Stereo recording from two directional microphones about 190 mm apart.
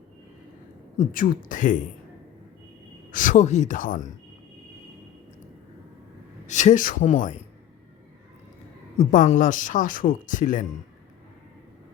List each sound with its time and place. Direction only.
0.9 s speech: 45° left (ahead or behind)
3.1 s speech: 45° left (ahead or behind)
6.5 s speech: 40° left (ahead or behind)
9.0 s speech: 40° left (ahead or behind)